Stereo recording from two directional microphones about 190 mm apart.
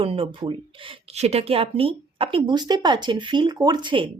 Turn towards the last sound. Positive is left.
turn(degrees=-25)  # may be behind; listen again after turning